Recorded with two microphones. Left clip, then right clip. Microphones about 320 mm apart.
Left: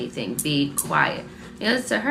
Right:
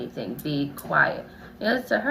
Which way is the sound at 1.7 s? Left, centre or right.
Centre.